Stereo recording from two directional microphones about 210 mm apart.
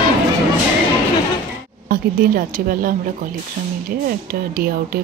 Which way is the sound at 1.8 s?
45° right (ahead or behind).